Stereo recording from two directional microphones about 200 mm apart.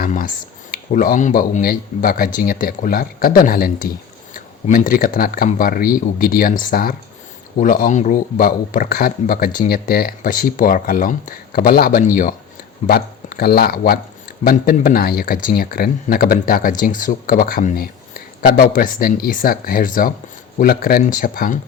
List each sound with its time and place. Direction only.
0.0 s speech: 40° left (ahead or behind)